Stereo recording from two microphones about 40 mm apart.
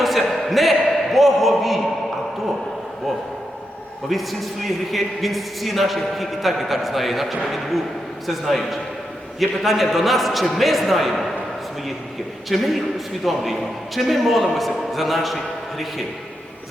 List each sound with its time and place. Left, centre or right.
0.0 s a sound: centre
4.1 s a man's voice: centre
12.5 s a man's voice: centre